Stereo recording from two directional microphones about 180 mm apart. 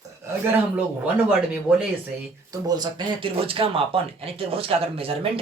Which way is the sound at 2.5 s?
20° right (ahead or behind).